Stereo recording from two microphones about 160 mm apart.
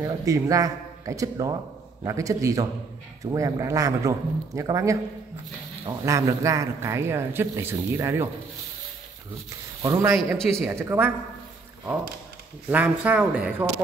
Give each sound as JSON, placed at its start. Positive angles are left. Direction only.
{"t": 0.0, "sound": "a man's voice", "side_deg": -20}
{"t": 9.8, "sound": "a man's voice", "side_deg": -20}
{"t": 10.1, "sound": "a man's voice", "side_deg": 5}
{"t": 10.7, "sound": "speech", "side_deg": -15}
{"t": 12.6, "sound": "speech", "side_deg": -10}